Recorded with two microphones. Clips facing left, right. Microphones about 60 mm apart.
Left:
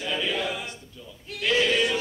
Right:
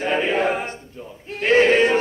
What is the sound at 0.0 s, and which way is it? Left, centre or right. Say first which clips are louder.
Choir: right 8 dB; right.